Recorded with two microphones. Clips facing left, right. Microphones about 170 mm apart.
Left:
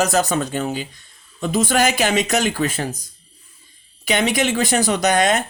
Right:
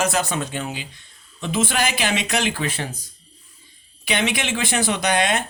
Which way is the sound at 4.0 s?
45° left (ahead or behind).